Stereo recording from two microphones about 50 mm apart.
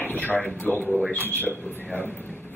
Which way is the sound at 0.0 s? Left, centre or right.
Left.